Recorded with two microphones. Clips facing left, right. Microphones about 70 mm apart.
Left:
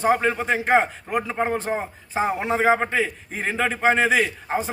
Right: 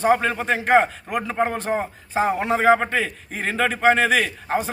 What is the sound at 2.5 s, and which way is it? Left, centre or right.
A man's voice, centre.